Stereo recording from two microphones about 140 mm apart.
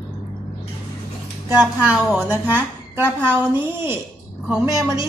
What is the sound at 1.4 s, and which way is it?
Speech, 10° right (ahead or behind).